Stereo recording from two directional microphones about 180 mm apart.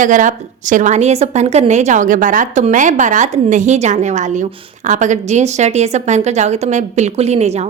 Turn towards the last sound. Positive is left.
turn(degrees=-35)  # may be behind; listen again after turning